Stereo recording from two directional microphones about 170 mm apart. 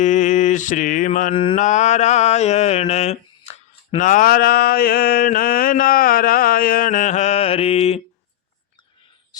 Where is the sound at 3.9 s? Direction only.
50° left (ahead or behind).